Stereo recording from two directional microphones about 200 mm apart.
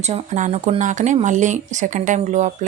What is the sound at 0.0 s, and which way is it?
Speech, 35° right (ahead or behind).